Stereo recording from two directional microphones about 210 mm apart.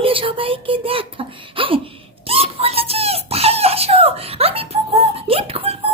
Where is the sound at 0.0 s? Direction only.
25° right (ahead or behind).